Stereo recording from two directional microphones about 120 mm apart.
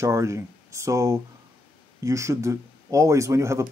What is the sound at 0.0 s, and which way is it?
Speech, 25° right (ahead or behind).